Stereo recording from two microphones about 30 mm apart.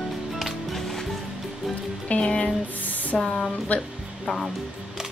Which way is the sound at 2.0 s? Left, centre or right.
Left.